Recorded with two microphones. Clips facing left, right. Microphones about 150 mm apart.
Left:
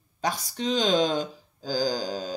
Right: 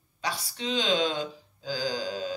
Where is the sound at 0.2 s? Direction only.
45° left (ahead or behind).